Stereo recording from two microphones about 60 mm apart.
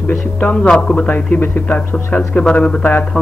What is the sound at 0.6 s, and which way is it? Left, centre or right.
Speech, centre.